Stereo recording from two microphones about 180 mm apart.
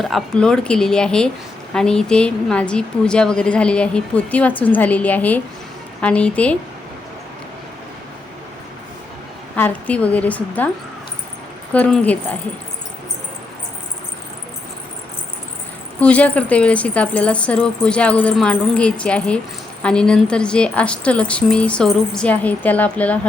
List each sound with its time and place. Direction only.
0.0 s a woman's voice: centre (ahead or behind)
9.6 s a woman's voice: 10° left (ahead or behind)
11.7 s a woman's voice: 5° left (ahead or behind)
16.0 s a woman's voice: 5° left (ahead or behind)